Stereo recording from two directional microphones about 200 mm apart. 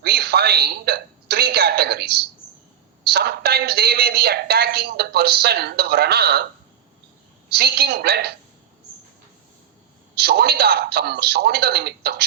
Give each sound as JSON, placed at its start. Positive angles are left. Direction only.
{"t": 0.0, "sound": "a woman's voice", "side_deg": -55}
{"t": 7.5, "sound": "a woman's voice", "side_deg": -55}
{"t": 10.2, "sound": "a woman's voice", "side_deg": -55}